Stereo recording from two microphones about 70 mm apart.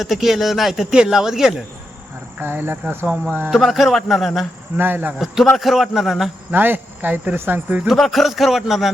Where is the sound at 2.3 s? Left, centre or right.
Right.